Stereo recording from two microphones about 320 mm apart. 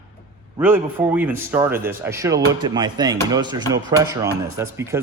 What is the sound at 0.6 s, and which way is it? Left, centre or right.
Speech, centre.